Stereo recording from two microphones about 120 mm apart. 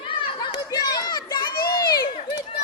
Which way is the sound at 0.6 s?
30° left (ahead or behind).